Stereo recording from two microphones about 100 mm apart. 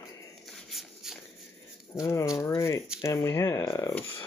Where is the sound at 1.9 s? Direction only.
30° left (ahead or behind).